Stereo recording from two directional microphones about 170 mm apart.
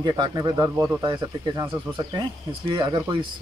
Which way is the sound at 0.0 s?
25° right (ahead or behind).